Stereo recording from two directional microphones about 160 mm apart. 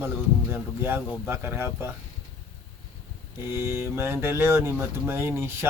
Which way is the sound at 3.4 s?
15° right (ahead or behind).